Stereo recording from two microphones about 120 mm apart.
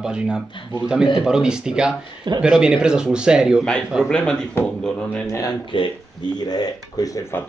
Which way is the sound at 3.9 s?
5° left (ahead or behind).